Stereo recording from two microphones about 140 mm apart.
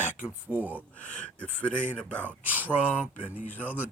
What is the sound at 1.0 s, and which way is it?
Speech, 10° left (ahead or behind).